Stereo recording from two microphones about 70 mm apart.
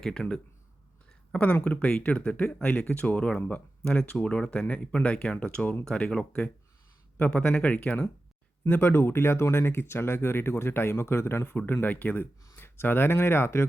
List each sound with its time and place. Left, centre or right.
0.0 s speech: centre
8.6 s speech: left
11.5 s speech: left